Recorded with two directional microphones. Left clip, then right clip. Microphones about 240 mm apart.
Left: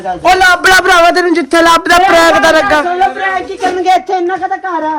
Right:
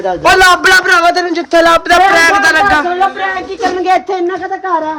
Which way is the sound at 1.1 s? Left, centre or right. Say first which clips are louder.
Left 1 dB; left.